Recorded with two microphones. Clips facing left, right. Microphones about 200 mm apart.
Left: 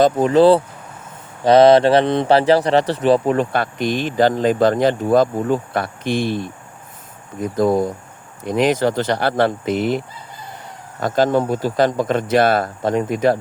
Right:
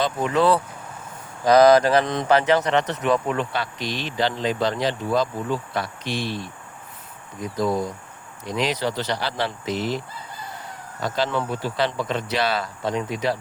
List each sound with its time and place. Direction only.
0.0 s speech: 35° left (ahead or behind)
3.5 s speech: 50° left (ahead or behind)
11.0 s speech: 45° left (ahead or behind)